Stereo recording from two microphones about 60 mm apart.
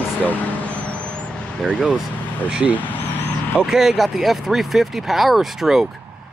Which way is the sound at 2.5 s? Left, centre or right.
Centre.